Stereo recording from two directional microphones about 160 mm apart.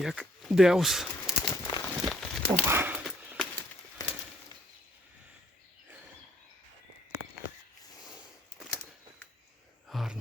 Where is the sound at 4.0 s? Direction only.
20° left (ahead or behind).